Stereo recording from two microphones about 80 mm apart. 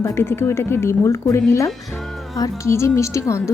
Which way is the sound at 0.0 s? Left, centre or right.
Left.